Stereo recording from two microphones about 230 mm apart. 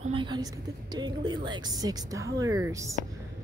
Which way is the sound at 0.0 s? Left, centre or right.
Right.